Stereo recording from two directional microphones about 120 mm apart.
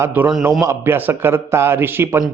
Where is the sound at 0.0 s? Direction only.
15° right (ahead or behind).